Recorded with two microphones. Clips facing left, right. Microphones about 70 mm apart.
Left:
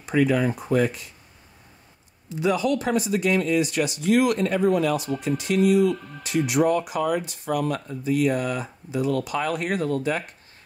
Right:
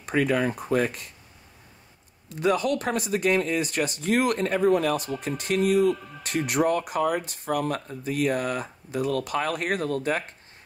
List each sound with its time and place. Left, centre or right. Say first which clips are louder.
0.0 s speech: left 2 dB; right
2.4 s speech: left 1 dB; right